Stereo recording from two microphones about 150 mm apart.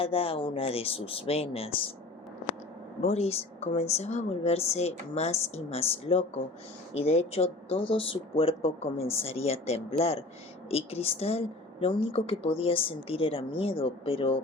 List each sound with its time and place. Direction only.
0.0 s a woman's voice: 40° left (ahead or behind)
3.0 s a woman's voice: 45° left (ahead or behind)